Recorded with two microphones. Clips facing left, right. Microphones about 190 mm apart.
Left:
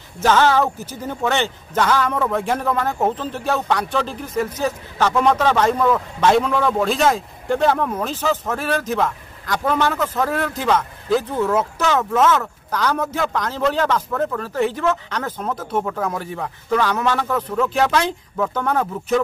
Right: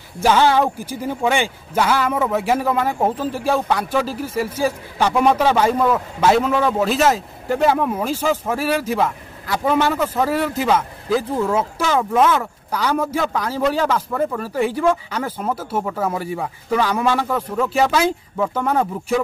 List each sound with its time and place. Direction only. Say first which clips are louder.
0.2 s speech: right 1 dB; 10° right (ahead or behind)